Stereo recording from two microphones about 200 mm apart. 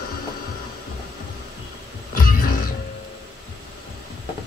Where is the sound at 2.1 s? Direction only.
45° left (ahead or behind).